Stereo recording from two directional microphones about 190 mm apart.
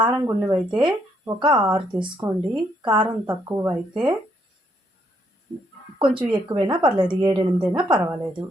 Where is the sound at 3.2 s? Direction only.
15° right (ahead or behind).